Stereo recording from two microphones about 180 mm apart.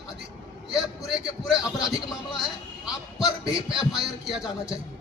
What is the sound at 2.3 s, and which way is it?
A man's voice, 5° right (ahead or behind).